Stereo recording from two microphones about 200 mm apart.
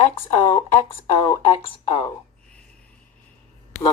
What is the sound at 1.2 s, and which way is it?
Speech, 25° left (ahead or behind).